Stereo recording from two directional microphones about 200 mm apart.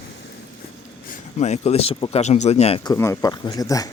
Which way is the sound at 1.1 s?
35° left (ahead or behind).